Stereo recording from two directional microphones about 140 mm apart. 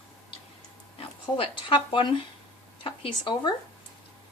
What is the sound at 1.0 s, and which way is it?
Speech, 40° left (ahead or behind).